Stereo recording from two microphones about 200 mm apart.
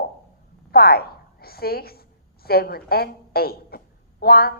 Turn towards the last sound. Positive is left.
turn(degrees=50)  # may be behind; listen again after turning